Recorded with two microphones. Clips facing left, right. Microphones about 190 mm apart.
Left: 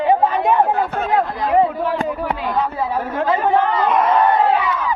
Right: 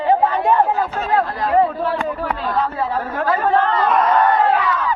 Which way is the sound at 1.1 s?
15° left (ahead or behind).